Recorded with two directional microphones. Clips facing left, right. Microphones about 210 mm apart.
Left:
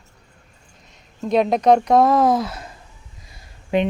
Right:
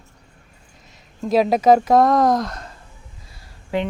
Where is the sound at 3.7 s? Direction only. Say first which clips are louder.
Left 4 dB; 20° left (ahead or behind).